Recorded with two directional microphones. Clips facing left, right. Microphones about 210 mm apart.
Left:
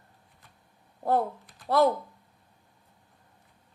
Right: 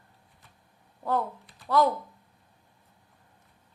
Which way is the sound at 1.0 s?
40° left (ahead or behind).